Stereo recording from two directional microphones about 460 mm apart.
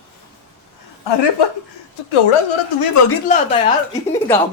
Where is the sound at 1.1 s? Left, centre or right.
Left.